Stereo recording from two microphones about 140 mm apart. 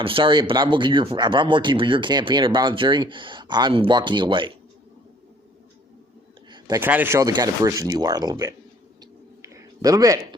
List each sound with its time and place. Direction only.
0.0 s speech: 40° right (ahead or behind)
6.7 s speech: 15° right (ahead or behind)
9.4 s a sound: 20° right (ahead or behind)